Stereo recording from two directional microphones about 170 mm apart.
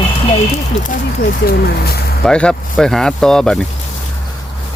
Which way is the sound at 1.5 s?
65° left (ahead or behind).